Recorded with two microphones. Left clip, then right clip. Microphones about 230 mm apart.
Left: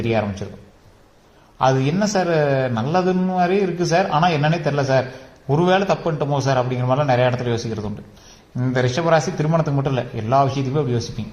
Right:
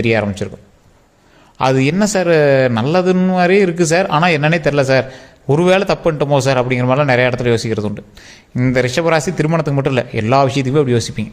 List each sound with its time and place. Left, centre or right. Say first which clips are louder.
0.0 s a man's voice: right 6 dB; right
1.5 s a man's voice: right 4 dB; right